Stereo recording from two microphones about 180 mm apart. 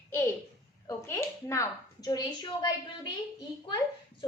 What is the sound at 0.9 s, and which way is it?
A woman's voice, 15° left (ahead or behind).